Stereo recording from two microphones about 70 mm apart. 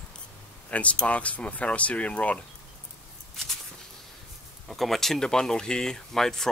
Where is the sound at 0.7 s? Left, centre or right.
Centre.